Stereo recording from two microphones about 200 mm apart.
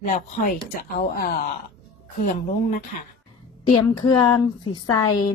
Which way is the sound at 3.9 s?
20° left (ahead or behind).